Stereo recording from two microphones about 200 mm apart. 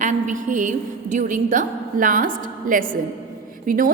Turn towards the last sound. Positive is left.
turn(degrees=-45)  # may be behind; listen again after turning